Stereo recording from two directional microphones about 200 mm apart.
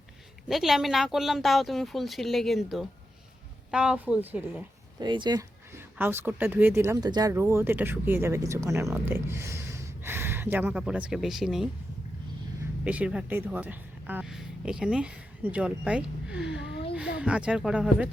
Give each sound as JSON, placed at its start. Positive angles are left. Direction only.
{"t": 0.4, "sound": "a woman's voice", "side_deg": 0}
{"t": 5.0, "sound": "speech", "side_deg": -20}
{"t": 12.8, "sound": "speech", "side_deg": -5}
{"t": 16.6, "sound": "a sound", "side_deg": 60}
{"t": 17.0, "sound": "speech", "side_deg": -5}